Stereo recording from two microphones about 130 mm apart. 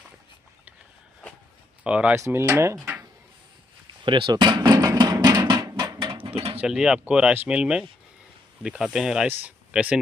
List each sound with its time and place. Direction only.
1.8 s speech: 10° right (ahead or behind)
2.1 s speech: 20° right (ahead or behind)
4.0 s a sound: 40° right (ahead or behind)
6.6 s speech: 5° right (ahead or behind)